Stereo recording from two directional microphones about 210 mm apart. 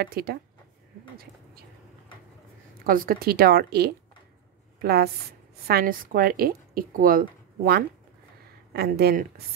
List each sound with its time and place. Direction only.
0.0 s speech: 45° right (ahead or behind)
2.8 s a woman's voice: 45° right (ahead or behind)